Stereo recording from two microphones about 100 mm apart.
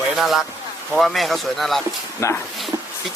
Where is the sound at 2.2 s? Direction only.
30° left (ahead or behind).